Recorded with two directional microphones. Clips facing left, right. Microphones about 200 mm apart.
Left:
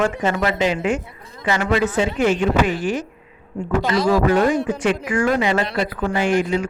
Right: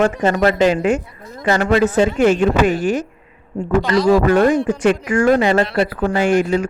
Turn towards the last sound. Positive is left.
turn(degrees=-45)  # may be behind; listen again after turning